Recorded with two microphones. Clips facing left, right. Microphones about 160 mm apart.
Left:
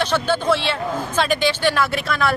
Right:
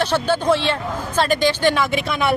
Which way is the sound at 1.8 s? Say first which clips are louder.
Right 1 dB; 10° right (ahead or behind).